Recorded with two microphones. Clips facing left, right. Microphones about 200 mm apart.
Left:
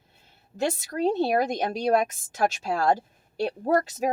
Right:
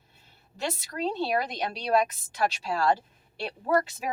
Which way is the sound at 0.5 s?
50° left (ahead or behind).